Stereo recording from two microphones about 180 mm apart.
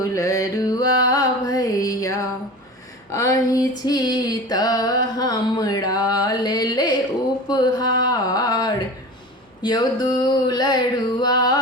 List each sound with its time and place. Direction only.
0.0 s music: 20° left (ahead or behind)
3.1 s speech: 15° left (ahead or behind)
3.8 s a sound: 20° left (ahead or behind)